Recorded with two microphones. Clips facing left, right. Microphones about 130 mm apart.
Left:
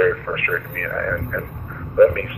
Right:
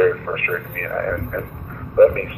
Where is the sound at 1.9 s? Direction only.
40° right (ahead or behind).